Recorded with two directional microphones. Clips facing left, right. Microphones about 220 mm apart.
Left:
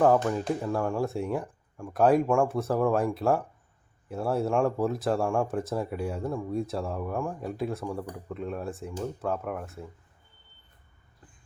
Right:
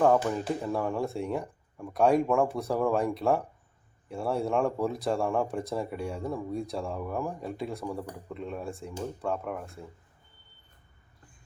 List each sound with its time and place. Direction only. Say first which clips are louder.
0.0 s speech: left 1 dB; centre (ahead or behind)